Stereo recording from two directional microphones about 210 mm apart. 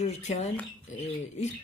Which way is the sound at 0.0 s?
30° left (ahead or behind).